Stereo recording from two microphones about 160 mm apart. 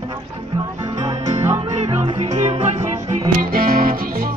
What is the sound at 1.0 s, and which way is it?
Music, 25° right (ahead or behind).